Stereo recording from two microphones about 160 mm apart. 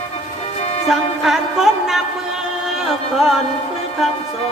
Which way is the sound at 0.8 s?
5° right (ahead or behind).